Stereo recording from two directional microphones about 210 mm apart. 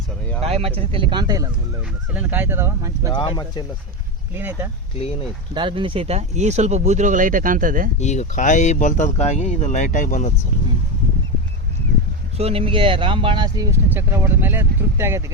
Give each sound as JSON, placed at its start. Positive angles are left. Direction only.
{"t": 0.4, "sound": "speech", "side_deg": -30}
{"t": 3.1, "sound": "speech", "side_deg": 20}
{"t": 4.4, "sound": "speech", "side_deg": -10}
{"t": 5.5, "sound": "speech", "side_deg": -25}
{"t": 7.9, "sound": "speech", "side_deg": 35}
{"t": 12.4, "sound": "speech", "side_deg": -30}